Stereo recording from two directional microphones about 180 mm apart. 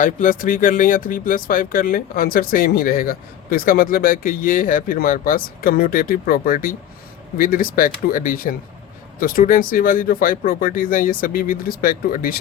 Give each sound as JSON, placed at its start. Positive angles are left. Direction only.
{"t": 0.0, "sound": "speech", "side_deg": 50}